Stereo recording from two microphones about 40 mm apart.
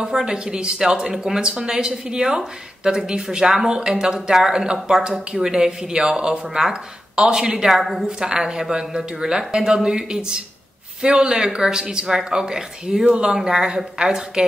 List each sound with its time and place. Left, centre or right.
0.0 s speech: centre
8.2 s speech: centre